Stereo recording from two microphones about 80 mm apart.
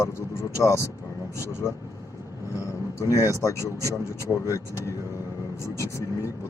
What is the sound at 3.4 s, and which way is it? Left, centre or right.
Speech, left.